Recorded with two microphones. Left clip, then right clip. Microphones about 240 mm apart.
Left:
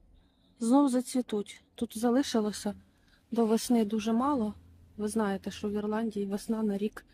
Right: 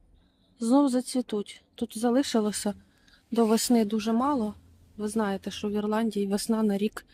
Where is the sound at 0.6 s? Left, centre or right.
Centre.